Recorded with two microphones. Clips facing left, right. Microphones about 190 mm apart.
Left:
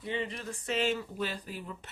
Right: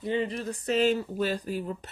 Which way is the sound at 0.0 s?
35° right (ahead or behind).